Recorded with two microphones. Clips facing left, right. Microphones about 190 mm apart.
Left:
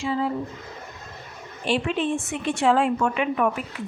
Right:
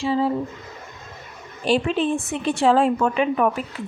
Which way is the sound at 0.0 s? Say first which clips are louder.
Right 4 dB; 30° right (ahead or behind).